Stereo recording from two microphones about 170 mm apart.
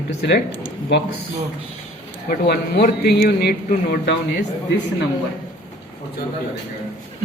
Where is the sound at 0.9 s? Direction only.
80° left.